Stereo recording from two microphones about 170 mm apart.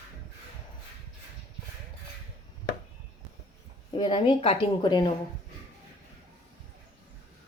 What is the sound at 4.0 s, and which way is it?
Speech, 30° left (ahead or behind).